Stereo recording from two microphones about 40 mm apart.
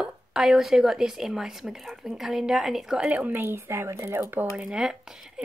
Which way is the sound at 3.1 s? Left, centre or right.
Right.